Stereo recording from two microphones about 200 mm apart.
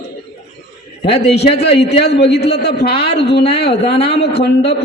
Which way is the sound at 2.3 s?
55° left (ahead or behind).